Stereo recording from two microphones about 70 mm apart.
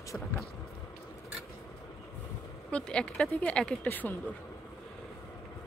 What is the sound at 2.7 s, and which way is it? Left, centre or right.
Speech, centre.